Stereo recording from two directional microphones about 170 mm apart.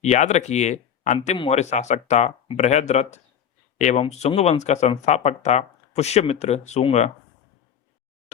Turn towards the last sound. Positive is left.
turn(degrees=40)  # may be behind; listen again after turning